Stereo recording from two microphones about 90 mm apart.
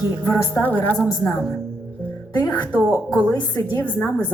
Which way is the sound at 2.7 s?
20° right (ahead or behind).